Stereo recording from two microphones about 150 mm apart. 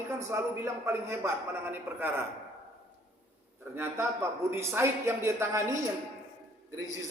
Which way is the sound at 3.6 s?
15° right (ahead or behind).